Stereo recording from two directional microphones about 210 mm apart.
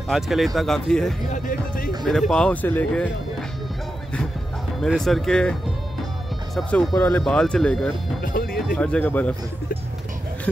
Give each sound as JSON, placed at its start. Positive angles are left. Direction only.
{"t": 0.1, "sound": "speech", "side_deg": 0}
{"t": 1.3, "sound": "speech", "side_deg": 40}
{"t": 2.0, "sound": "speech", "side_deg": 0}
{"t": 4.7, "sound": "speech", "side_deg": 0}
{"t": 8.2, "sound": "speech", "side_deg": 45}
{"t": 8.5, "sound": "speech", "side_deg": 5}